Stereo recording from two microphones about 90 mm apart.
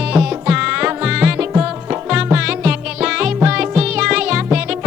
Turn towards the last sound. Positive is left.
turn(degrees=-10)  # may be behind; listen again after turning